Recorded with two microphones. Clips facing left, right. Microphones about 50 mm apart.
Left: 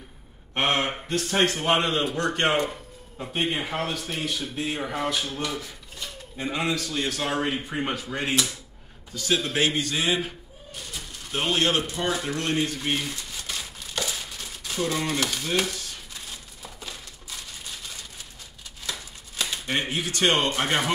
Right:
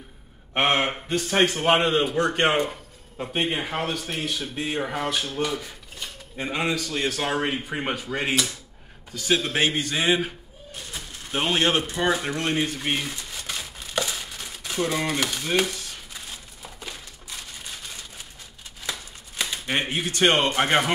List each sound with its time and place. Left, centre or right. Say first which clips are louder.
0.6 s speech: right 2 dB; centre
1.4 s a man's voice: right 3 dB; centre
9.4 s speech: right 1 dB; right
13.3 s crumpling: right 1 dB; right
15.0 s speech: right 1 dB; right
16.6 s crushing: right 1 dB; right
19.7 s speech: right 2 dB; right